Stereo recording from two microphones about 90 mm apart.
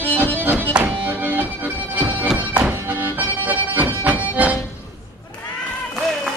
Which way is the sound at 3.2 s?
20° right (ahead or behind).